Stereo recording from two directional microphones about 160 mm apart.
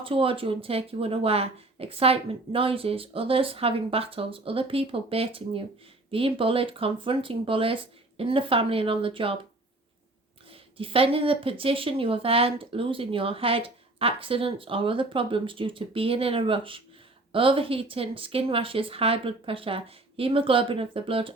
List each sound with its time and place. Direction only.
0.0 s speech: 35° right (ahead or behind)
10.5 s speech: 35° right (ahead or behind)